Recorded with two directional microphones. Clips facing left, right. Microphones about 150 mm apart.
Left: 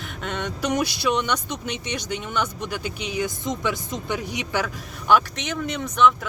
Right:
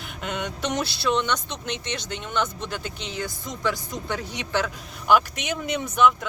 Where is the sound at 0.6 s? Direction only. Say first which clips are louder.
Left 4 dB; 10° left (ahead or behind).